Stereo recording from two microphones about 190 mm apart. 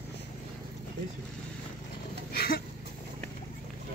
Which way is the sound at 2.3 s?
55° left (ahead or behind).